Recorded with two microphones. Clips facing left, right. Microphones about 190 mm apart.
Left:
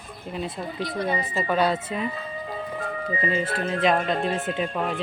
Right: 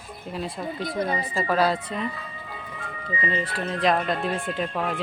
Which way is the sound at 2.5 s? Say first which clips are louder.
Left 9 dB; 40° left (ahead or behind).